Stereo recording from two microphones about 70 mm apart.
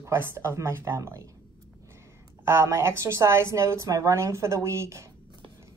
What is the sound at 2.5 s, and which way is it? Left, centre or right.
Speech, right.